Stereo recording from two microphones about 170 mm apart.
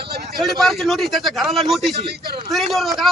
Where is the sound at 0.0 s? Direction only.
75° right (ahead or behind).